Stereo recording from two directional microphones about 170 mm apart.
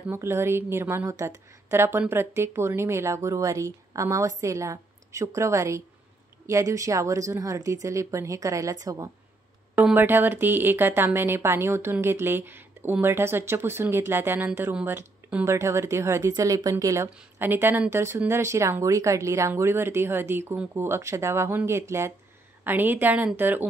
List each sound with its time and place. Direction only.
0.1 s a woman's voice: 15° right (ahead or behind)
9.8 s speech: 10° right (ahead or behind)